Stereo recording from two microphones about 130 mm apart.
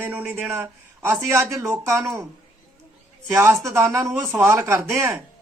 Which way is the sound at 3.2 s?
15° right (ahead or behind).